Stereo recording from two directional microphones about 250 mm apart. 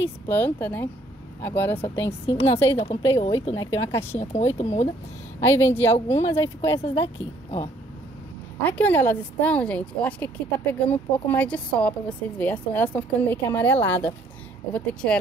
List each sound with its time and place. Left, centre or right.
0.0 s speech: centre
2.2 s a woman's voice: left
3.4 s speech: centre
4.2 s a woman's voice: left
5.4 s speech: centre
5.9 s a woman's voice: left
6.2 s speech: centre
8.6 s speech: centre